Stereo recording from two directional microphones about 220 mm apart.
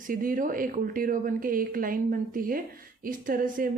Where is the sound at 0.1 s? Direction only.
40° right (ahead or behind).